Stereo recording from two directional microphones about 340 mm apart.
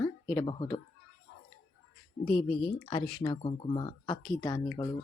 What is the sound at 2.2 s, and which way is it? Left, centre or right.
Speech, centre.